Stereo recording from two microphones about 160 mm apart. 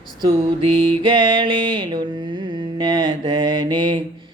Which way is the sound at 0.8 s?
30° right (ahead or behind).